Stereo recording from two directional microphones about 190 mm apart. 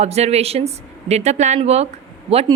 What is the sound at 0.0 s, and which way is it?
A woman's voice, 35° right (ahead or behind).